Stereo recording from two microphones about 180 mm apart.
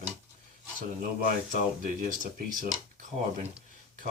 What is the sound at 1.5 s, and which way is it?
Speech, 50° right (ahead or behind).